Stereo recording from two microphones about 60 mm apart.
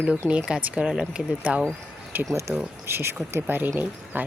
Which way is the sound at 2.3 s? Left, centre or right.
Right.